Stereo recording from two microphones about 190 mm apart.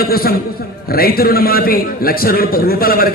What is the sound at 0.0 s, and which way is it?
A man's voice, 55° left (ahead or behind).